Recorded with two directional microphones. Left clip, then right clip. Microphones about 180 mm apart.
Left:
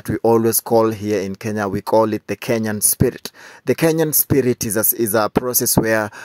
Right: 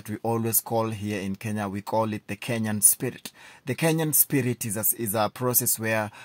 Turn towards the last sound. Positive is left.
turn(degrees=35)  # may be behind; listen again after turning